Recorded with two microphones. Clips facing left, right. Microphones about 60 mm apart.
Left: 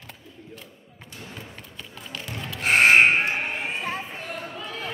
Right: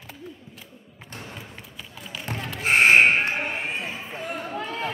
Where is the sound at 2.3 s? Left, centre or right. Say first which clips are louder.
Right 5 dB; right.